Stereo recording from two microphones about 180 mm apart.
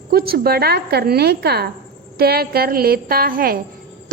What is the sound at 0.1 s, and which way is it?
A woman's voice, 60° right (ahead or behind).